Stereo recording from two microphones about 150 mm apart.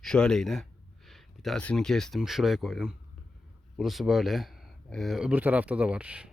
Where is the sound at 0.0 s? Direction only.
5° left (ahead or behind).